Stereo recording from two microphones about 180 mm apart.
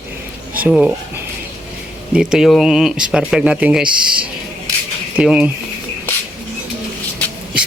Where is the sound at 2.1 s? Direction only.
5° right (ahead or behind).